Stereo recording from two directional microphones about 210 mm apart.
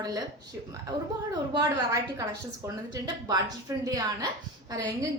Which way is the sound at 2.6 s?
20° right (ahead or behind).